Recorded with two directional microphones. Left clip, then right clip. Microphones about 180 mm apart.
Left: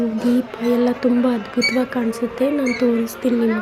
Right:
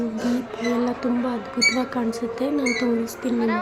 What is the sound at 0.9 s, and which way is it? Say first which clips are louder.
Speech: left 7 dB; 20° left (ahead or behind).